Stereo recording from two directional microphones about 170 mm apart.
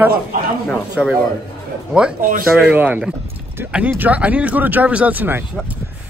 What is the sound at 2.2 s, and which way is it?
Speech, 55° right (ahead or behind).